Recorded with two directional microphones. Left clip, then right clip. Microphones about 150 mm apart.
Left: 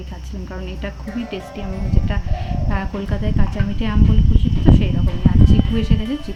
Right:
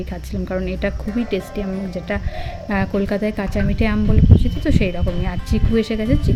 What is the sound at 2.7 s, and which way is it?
A woman's voice, 35° right (ahead or behind).